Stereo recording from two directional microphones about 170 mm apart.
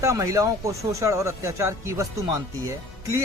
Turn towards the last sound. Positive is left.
turn(degrees=-20)  # may be behind; listen again after turning